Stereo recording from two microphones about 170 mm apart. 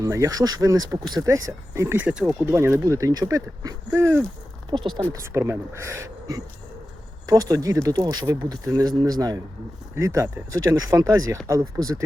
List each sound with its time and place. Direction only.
0.0 s speech: 20° right (ahead or behind)